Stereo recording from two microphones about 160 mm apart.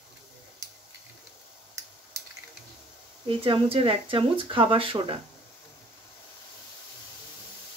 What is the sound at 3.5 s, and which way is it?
Speech, 35° right (ahead or behind).